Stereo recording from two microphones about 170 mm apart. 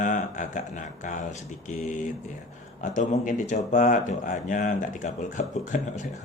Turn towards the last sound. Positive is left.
turn(degrees=45)  # may be behind; listen again after turning